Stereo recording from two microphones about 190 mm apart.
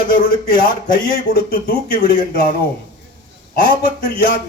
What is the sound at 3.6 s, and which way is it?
Speech, 50° left (ahead or behind).